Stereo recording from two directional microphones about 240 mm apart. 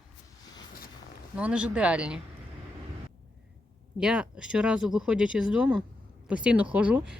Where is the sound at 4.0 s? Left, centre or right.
Centre.